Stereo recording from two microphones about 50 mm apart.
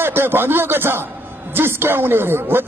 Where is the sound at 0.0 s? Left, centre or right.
Right.